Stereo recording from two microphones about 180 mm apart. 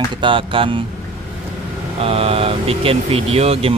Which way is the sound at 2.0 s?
35° right (ahead or behind).